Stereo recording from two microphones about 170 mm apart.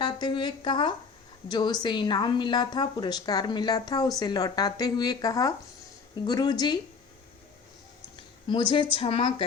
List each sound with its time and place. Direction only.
0.0 s a woman's voice: 25° left (ahead or behind)
8.4 s speech: 30° left (ahead or behind)